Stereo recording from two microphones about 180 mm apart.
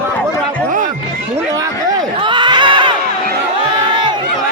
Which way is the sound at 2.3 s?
25° right (ahead or behind).